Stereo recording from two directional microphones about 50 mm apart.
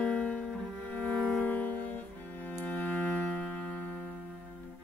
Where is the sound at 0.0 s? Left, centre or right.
Left.